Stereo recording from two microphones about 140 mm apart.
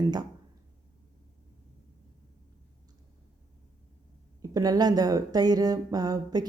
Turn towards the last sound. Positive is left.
turn(degrees=-25)  # may be behind; listen again after turning